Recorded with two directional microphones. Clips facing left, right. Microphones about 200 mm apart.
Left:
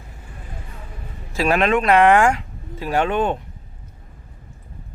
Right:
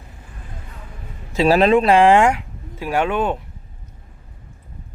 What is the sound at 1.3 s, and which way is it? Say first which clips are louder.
Speech: right 4 dB; 30° right (ahead or behind).